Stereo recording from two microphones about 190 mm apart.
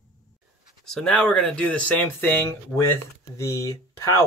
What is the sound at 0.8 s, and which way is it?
Speech, 5° left (ahead or behind).